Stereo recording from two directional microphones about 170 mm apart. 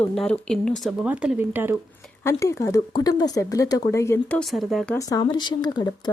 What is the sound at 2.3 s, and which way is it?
Speech, 15° left (ahead or behind).